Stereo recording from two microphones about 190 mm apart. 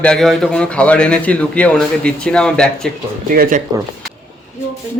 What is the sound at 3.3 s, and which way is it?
Speech, 50° right (ahead or behind).